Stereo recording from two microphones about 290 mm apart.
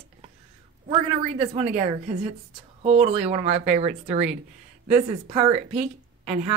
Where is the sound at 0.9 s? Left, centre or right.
Right.